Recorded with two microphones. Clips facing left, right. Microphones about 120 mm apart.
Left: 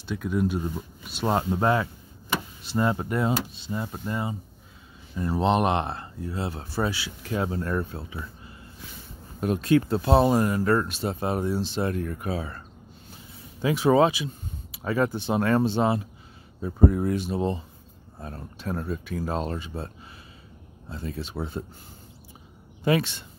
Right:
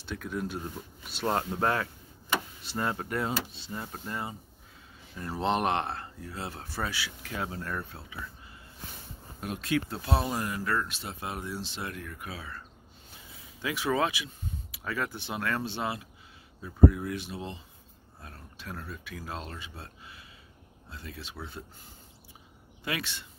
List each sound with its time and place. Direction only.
0.0 s speech: 10° left (ahead or behind); by 8.2 s 35° left (ahead or behind)
9.4 s speech: 40° left (ahead or behind)
15.0 s speech: 40° left (ahead or behind)
20.9 s speech: 35° left (ahead or behind)